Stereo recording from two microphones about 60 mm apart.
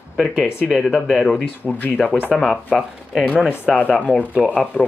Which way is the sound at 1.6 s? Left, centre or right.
Left.